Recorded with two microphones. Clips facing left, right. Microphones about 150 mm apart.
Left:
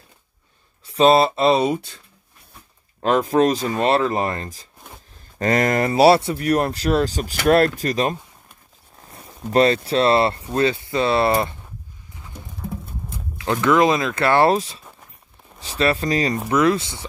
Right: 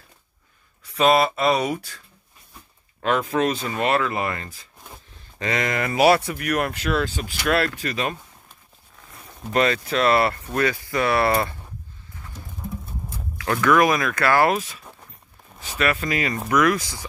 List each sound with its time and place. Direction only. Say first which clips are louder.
0.8 s speech: left 4 dB; 30° left (ahead or behind)
3.0 s speech: left 5 dB; 35° left (ahead or behind)
13.1 s speech: left 2 dB; 20° left (ahead or behind)